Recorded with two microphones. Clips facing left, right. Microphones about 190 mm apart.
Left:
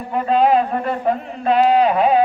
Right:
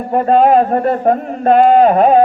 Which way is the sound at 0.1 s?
50° right (ahead or behind).